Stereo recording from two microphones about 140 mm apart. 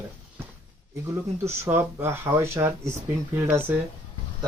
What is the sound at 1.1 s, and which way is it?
Speech, 20° right (ahead or behind).